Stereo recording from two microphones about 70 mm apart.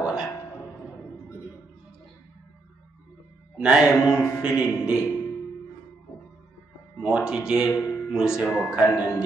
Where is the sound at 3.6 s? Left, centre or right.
Centre.